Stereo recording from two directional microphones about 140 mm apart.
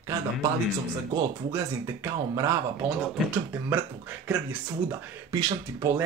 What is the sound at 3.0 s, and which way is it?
Speech, 10° right (ahead or behind).